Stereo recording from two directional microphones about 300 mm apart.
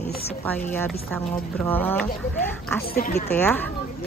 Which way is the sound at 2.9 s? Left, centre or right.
Left.